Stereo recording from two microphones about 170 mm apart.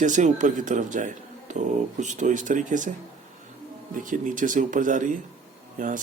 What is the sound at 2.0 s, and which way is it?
Speech, 45° right (ahead or behind).